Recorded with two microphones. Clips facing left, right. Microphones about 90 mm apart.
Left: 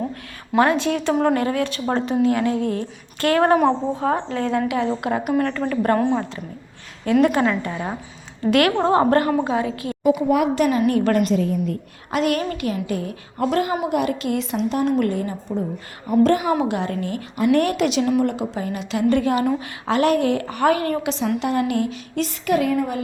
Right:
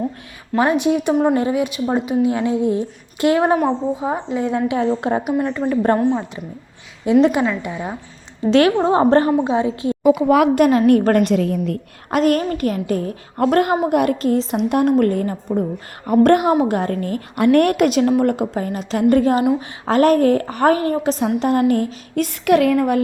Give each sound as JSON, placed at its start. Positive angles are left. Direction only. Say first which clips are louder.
{"t": 0.6, "sound": "a woman's voice", "louder": "right 2 dB", "side_deg": -15}
{"t": 3.6, "sound": "a woman's voice", "louder": "even", "side_deg": -5}
{"t": 6.0, "sound": "a woman's voice", "louder": "right 2 dB", "side_deg": -5}
{"t": 7.0, "sound": "a woman's voice", "louder": "right 3 dB", "side_deg": -15}
{"t": 8.4, "sound": "a woman's voice", "louder": "right 3 dB", "side_deg": -25}
{"t": 10.2, "sound": "a woman's voice", "louder": "right 6 dB", "side_deg": -90}
{"t": 10.5, "sound": "a woman's voice", "louder": "right 5 dB", "side_deg": -50}
{"t": 11.1, "sound": "a woman's voice", "louder": "right 3 dB", "side_deg": -70}
{"t": 12.1, "sound": "a woman's voice", "louder": "right 4 dB", "side_deg": -40}
{"t": 14.5, "sound": "a woman's voice", "louder": "right 2 dB", "side_deg": -55}
{"t": 16.0, "sound": "a woman's voice", "louder": "right 4 dB", "side_deg": -60}
{"t": 16.6, "sound": "a woman's voice", "louder": "right 4 dB", "side_deg": -45}
{"t": 17.3, "sound": "a woman's voice", "louder": "right 4 dB", "side_deg": -60}
{"t": 22.1, "sound": "a woman's voice", "louder": "right 6 dB", "side_deg": -55}